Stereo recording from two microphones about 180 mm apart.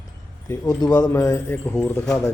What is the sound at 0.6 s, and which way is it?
Speech, 20° left (ahead or behind).